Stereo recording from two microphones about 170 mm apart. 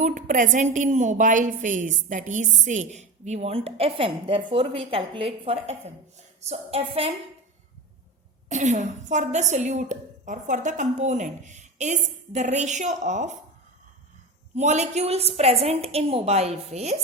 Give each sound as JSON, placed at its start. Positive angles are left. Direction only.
{"t": 0.0, "sound": "a woman's voice", "side_deg": -50}
{"t": 8.4, "sound": "a woman's voice", "side_deg": -45}
{"t": 14.5, "sound": "a woman's voice", "side_deg": -40}